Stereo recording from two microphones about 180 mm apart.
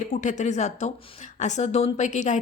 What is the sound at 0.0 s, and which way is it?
Speech, 45° left (ahead or behind).